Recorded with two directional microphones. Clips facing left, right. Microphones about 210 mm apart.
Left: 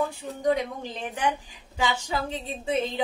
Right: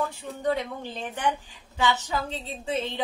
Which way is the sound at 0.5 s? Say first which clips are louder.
Left 2 dB; 15° left (ahead or behind).